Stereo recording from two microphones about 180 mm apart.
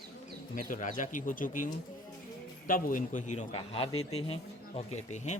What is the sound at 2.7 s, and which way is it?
A man's voice, 50° left (ahead or behind).